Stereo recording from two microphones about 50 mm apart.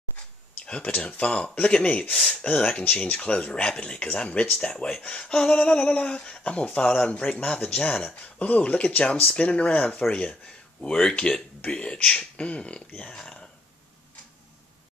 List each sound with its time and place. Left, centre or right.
0.7 s speech: centre